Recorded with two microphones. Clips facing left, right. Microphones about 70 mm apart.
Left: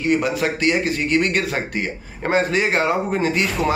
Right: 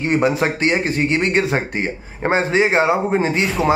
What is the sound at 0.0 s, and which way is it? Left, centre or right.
Speech, right.